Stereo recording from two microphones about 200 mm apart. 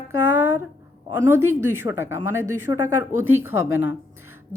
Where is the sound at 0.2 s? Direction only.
10° right (ahead or behind).